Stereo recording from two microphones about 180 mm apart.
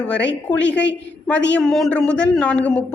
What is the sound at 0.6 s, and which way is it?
Speech, 80° left.